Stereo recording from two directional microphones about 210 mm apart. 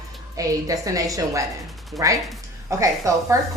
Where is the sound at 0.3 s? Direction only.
15° right (ahead or behind).